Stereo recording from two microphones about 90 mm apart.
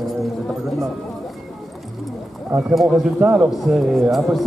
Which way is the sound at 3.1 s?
15° right (ahead or behind).